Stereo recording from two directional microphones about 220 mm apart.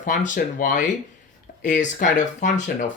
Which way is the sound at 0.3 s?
35° left (ahead or behind).